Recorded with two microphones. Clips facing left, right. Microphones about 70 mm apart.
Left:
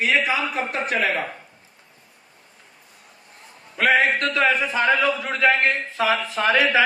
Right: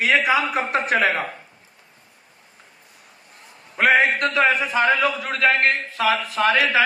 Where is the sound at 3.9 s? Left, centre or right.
Right.